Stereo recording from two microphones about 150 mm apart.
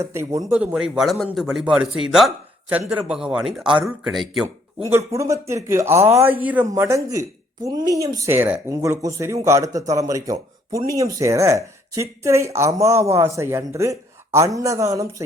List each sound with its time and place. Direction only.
0.0 s a man's voice: 20° right (ahead or behind)
0.5 s speech: 5° right (ahead or behind)
4.9 s a man's voice: 20° right (ahead or behind)